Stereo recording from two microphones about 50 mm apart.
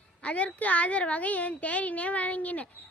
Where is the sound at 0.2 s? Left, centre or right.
Left.